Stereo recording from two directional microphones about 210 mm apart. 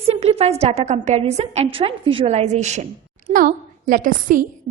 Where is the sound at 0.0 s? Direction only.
30° right (ahead or behind).